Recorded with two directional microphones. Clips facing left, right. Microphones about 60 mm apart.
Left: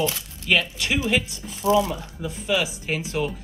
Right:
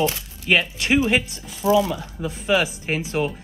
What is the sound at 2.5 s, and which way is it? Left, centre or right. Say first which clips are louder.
Speech: right 3 dB; right.